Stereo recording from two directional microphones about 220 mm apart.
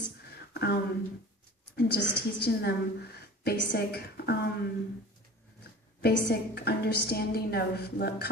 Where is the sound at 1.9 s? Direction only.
90° left.